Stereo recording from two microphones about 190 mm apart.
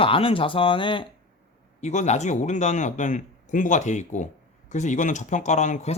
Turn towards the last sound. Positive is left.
turn(degrees=35)  # may be behind; listen again after turning